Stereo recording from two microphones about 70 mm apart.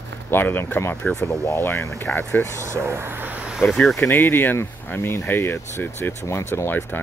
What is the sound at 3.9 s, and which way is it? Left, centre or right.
Speech, left.